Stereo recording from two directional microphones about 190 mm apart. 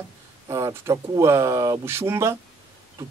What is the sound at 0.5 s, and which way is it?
Speech, 15° right (ahead or behind).